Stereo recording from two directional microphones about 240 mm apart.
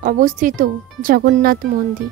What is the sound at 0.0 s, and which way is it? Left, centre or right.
Speech, right.